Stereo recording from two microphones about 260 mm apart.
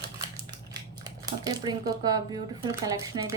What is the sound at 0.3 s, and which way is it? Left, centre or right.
Speech, centre.